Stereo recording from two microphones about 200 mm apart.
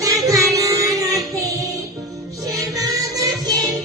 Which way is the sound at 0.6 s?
15° right (ahead or behind).